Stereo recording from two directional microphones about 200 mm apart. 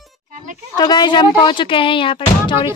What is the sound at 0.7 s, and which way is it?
Speech, 20° left (ahead or behind).